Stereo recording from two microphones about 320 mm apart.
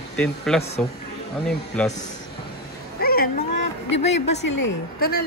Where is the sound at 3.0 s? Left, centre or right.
Left.